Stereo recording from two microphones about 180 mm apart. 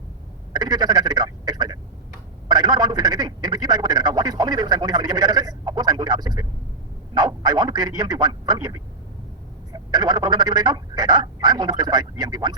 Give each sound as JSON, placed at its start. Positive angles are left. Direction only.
{"t": 0.5, "sound": "a man's voice", "side_deg": -20}